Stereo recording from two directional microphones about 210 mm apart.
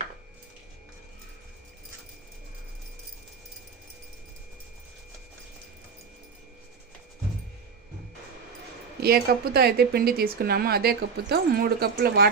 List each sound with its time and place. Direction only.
9.0 s a woman's voice: 45° right (ahead or behind)